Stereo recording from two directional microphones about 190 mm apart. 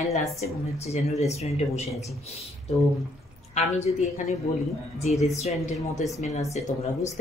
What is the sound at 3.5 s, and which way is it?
Speech, 35° left (ahead or behind).